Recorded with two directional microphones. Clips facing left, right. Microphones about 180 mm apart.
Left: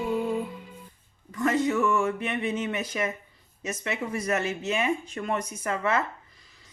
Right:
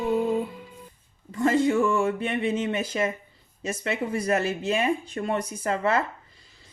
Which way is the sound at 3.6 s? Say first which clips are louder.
Right 3 dB; 30° right (ahead or behind).